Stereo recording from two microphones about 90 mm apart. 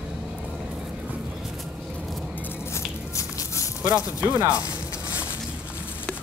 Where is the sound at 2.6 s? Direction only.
35° left (ahead or behind).